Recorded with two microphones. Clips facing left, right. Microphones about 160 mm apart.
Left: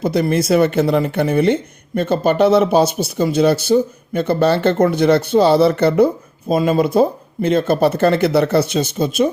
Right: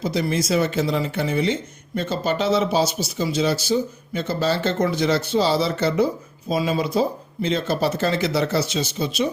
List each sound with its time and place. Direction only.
0.0 s speech: 55° left (ahead or behind)